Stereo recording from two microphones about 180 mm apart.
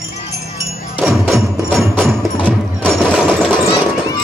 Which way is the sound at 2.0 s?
Centre (ahead or behind).